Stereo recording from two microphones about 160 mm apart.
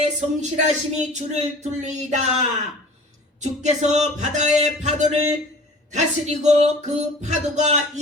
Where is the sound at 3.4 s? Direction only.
45° right (ahead or behind).